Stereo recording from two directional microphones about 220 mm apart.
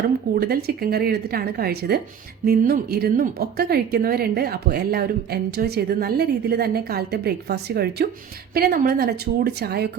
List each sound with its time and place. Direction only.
0.3 s a woman's voice: 45° right (ahead or behind)